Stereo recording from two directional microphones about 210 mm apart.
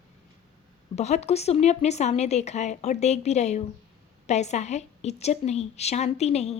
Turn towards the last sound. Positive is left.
turn(degrees=30)  # may be behind; listen again after turning